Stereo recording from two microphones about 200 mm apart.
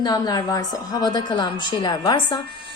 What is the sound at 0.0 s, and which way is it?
A woman's voice, 20° left (ahead or behind).